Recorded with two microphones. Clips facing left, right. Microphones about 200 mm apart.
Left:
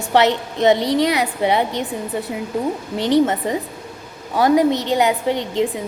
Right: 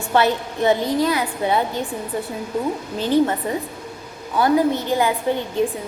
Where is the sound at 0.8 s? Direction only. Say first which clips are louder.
Left 2 dB; 90° left.